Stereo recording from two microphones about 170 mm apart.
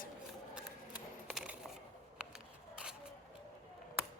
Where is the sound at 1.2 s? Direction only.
5° right (ahead or behind).